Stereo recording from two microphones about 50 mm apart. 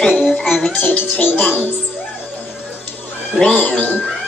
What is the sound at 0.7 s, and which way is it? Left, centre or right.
Speech, left.